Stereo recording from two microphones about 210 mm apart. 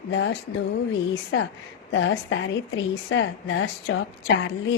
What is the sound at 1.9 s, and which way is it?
A woman's voice, 60° left (ahead or behind).